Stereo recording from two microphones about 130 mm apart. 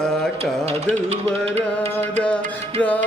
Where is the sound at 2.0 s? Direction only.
10° left (ahead or behind).